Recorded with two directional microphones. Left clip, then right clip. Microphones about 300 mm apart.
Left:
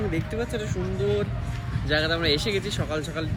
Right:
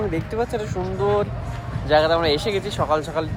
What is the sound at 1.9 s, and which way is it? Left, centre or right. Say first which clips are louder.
A man's voice: right 6 dB; centre.